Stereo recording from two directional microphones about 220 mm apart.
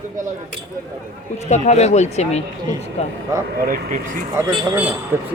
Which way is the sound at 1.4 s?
30° left (ahead or behind).